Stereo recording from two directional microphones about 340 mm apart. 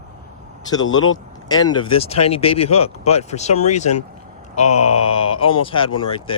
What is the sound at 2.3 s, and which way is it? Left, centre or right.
Speech, centre.